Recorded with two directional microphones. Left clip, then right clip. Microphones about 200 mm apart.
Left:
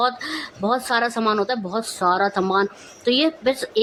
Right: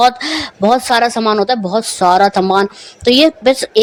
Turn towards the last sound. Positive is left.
turn(degrees=-30)  # may be behind; listen again after turning